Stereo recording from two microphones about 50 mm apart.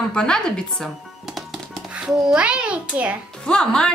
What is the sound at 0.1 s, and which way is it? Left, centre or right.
Speech, centre.